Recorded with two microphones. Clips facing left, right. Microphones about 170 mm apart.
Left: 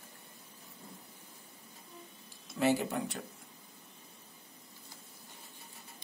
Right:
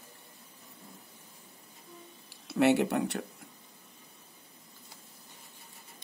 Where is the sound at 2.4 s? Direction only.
70° right (ahead or behind).